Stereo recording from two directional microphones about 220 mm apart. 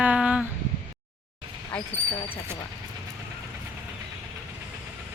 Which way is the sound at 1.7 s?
5° left (ahead or behind).